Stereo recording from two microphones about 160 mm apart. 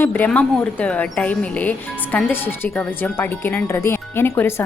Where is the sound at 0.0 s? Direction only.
10° left (ahead or behind).